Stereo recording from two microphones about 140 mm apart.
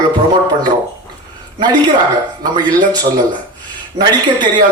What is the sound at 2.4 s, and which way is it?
A man's voice, 30° right (ahead or behind).